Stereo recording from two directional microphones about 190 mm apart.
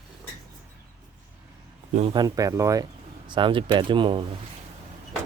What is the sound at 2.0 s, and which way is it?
Speech, 30° right (ahead or behind).